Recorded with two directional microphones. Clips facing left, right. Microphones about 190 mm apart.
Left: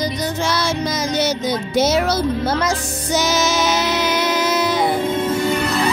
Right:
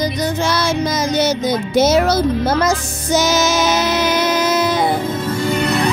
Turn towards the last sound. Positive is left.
turn(degrees=0)  # may be behind; listen again after turning